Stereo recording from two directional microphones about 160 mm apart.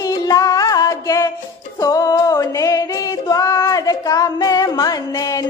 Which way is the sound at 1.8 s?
20° left (ahead or behind).